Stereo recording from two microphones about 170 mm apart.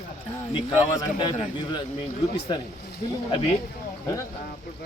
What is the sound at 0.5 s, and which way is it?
A man's voice, 25° left (ahead or behind).